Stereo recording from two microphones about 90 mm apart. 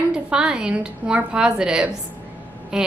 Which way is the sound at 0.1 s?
10° right (ahead or behind).